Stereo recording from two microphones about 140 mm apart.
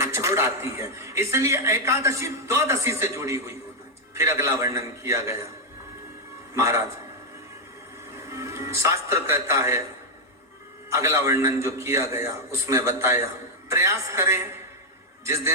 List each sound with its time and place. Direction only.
0.0 s a man's voice: 20° right (ahead or behind)
6.5 s speech: 20° right (ahead or behind)
8.1 s a man's voice: 20° right (ahead or behind)
10.8 s a man's voice: 20° right (ahead or behind)